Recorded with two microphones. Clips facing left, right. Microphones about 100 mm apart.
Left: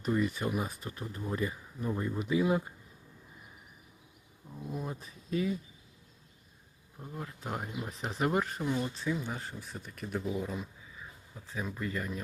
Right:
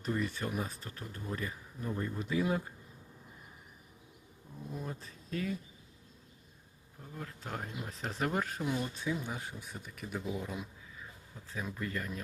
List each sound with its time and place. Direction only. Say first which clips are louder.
0.0 s speech: left 4 dB; 5° left (ahead or behind)
4.7 s speech: left 3 dB; 10° left (ahead or behind)
7.0 s speech: left 3 dB; 15° left (ahead or behind)
7.8 s speech: left 3 dB; centre (ahead or behind)
11.4 s speech: left 2 dB; centre (ahead or behind)